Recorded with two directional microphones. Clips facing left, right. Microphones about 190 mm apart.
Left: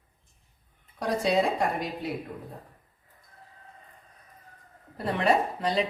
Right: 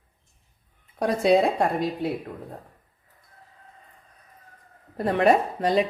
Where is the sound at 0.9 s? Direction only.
55° right (ahead or behind).